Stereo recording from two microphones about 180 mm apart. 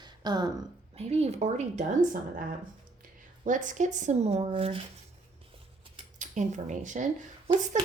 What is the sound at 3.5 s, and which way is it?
Speech, 45° right (ahead or behind).